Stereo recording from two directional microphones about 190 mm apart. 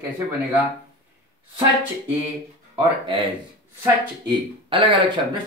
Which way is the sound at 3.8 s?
25° right (ahead or behind).